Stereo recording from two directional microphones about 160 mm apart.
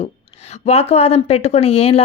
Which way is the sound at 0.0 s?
45° left (ahead or behind).